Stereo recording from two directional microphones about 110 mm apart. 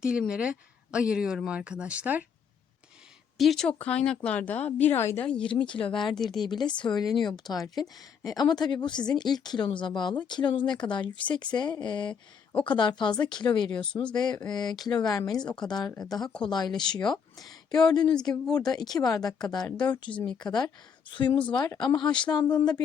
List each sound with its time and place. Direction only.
0.0 s speech: 10° right (ahead or behind)
3.3 s speech: centre (ahead or behind); by 5.2 s 20° left (ahead or behind)
5.2 s speech: 10° left (ahead or behind)
5.5 s speech: 50° left (ahead or behind)
6.1 s speech: 5° left (ahead or behind)
6.8 s speech: 40° left (ahead or behind)